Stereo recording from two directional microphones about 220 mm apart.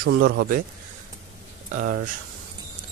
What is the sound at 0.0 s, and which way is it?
Speech, 45° right (ahead or behind).